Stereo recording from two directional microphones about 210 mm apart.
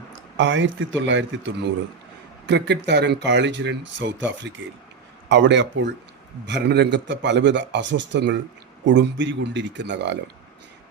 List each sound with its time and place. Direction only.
0.3 s a man's voice: 60° right (ahead or behind)